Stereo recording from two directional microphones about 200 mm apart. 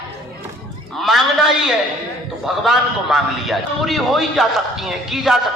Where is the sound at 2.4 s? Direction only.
Centre (ahead or behind).